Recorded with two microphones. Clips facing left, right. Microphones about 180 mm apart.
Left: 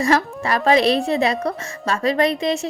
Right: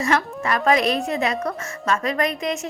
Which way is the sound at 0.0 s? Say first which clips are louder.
Left 3 dB; 35° left (ahead or behind).